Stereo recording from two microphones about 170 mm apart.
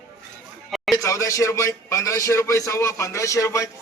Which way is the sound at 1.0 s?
20° left (ahead or behind).